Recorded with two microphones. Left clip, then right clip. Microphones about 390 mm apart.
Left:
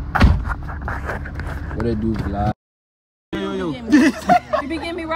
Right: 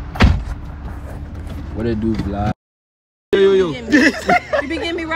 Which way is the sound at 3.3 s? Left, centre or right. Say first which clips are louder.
Right 12 dB; left.